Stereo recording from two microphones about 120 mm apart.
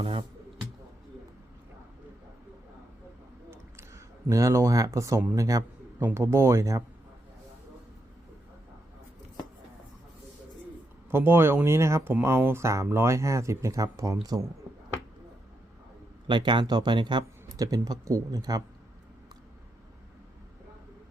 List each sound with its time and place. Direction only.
0.0 s speech: 45° right (ahead or behind)
3.5 s a sound: 25° right (ahead or behind)
5.3 s a man's voice: 30° right (ahead or behind)
11.1 s speech: 20° right (ahead or behind)
16.2 s speech: 40° right (ahead or behind)